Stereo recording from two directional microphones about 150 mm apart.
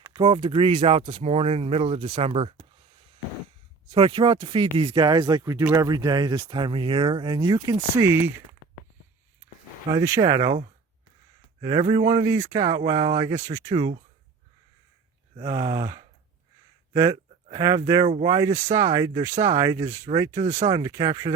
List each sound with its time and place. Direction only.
0.0 s a sound: 25° right (ahead or behind)
0.3 s speech: 35° right (ahead or behind)
3.9 s speech: 35° right (ahead or behind)
8.0 s speech: 15° right (ahead or behind)
10.2 s speech: 25° right (ahead or behind)
11.6 s speech: 30° right (ahead or behind)
15.4 s speech: 20° right (ahead or behind)